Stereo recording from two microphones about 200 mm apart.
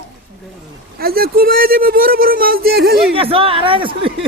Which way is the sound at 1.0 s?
50° right (ahead or behind).